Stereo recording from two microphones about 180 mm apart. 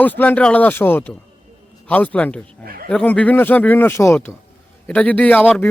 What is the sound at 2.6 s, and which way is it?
Speech, 55° right (ahead or behind).